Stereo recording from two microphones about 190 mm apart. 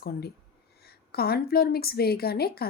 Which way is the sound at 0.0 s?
55° left (ahead or behind).